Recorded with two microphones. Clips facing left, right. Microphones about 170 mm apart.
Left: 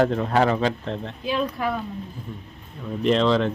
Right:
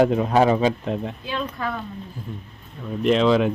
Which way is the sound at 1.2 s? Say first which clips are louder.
Left 3 dB; 10° left (ahead or behind).